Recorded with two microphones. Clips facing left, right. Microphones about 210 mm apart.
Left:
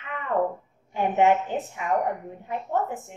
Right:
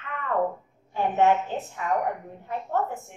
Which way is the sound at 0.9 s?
15° left (ahead or behind).